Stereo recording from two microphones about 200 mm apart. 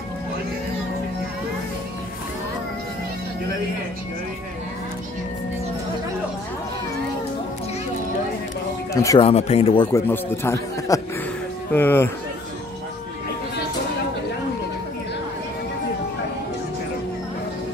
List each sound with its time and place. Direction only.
8.9 s speech: 15° left (ahead or behind)
9.2 s speech: 30° left (ahead or behind)
9.9 s a man's voice: 10° left (ahead or behind)